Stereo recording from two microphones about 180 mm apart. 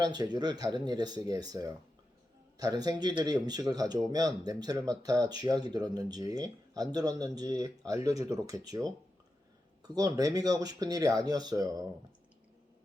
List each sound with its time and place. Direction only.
0.0 s speech: 25° right (ahead or behind)